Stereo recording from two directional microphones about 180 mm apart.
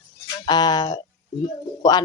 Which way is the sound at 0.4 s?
25° left (ahead or behind).